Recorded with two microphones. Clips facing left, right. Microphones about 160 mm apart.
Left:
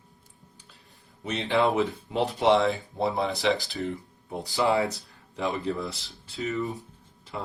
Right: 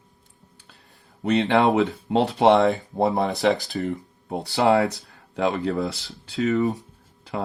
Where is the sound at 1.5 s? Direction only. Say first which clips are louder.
Right 2 dB; 75° right (ahead or behind); by 3.5 s 45° right (ahead or behind).